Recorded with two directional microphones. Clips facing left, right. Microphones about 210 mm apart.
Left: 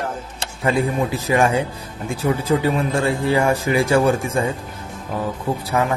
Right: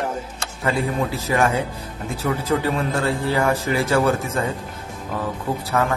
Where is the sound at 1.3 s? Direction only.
15° left (ahead or behind).